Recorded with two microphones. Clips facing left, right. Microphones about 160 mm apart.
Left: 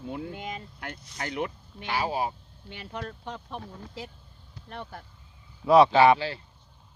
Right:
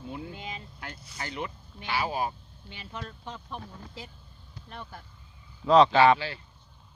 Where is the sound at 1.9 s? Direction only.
30° left (ahead or behind).